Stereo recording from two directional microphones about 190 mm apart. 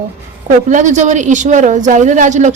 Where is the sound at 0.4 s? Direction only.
40° right (ahead or behind).